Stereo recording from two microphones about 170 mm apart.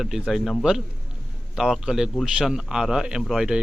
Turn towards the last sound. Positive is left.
turn(degrees=-5)  # may be behind; listen again after turning